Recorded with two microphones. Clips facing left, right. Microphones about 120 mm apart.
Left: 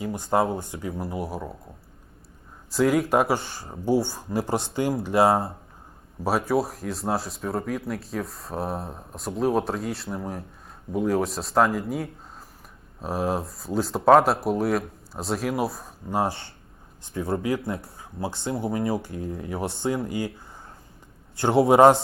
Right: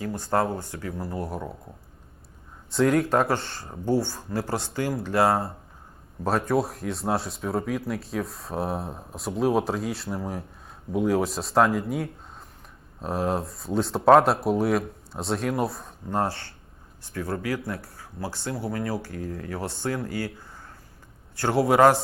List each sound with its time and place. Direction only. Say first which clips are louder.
0.0 s speech: left 2 dB; 15° left (ahead or behind)
1.1 s speech: left 1 dB; 5° left (ahead or behind)
2.6 s speech: even; 5° left (ahead or behind); by 5.5 s 20° left (ahead or behind)
6.2 s speech: left 1 dB; 5° left (ahead or behind)
17.0 s speech: left 3 dB; 20° left (ahead or behind)
21.3 s speech: left 3 dB; 20° left (ahead or behind)